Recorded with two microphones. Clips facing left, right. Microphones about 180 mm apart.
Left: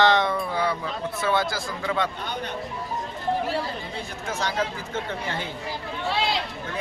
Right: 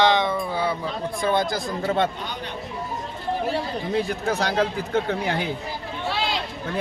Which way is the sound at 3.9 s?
65° right (ahead or behind).